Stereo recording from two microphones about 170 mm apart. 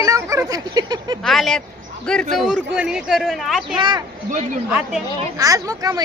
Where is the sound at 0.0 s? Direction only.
20° right (ahead or behind).